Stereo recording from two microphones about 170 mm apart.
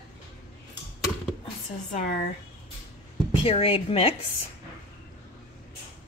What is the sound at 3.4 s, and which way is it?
Speech, 35° left (ahead or behind).